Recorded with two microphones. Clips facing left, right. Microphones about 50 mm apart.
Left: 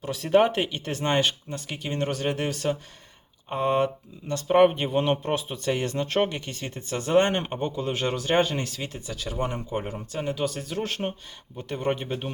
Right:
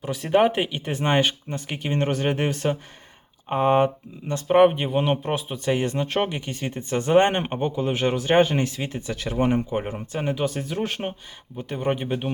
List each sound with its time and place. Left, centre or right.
0.0 s speech: centre